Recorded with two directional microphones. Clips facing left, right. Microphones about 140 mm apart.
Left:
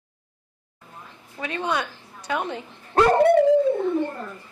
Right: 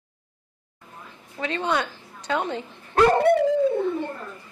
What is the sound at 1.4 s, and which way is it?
Speech, 15° left (ahead or behind).